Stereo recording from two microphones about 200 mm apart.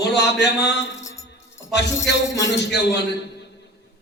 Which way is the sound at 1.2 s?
60° left (ahead or behind).